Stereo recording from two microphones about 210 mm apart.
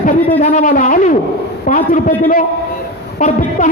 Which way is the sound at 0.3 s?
35° left (ahead or behind).